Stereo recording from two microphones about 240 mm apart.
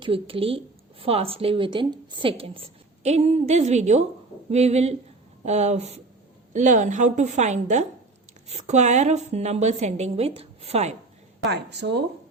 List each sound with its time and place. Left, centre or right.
0.0 s a woman's voice: right
11.4 s speech: right